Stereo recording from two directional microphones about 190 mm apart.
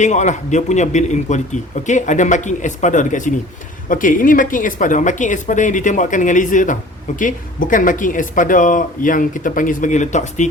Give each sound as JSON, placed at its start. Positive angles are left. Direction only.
{"t": 0.0, "sound": "a man's voice", "side_deg": 40}